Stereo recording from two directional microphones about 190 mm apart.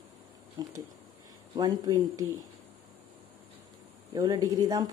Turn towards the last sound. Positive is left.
turn(degrees=-20)  # may be behind; listen again after turning